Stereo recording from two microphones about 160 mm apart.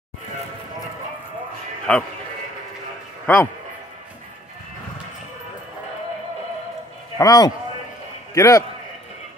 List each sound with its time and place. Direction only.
1.9 s a man's voice: 10° left (ahead or behind)
3.3 s a man's voice: 10° left (ahead or behind)
7.2 s a man's voice: 20° left (ahead or behind)